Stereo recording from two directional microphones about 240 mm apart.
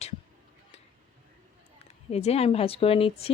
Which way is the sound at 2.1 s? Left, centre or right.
Left.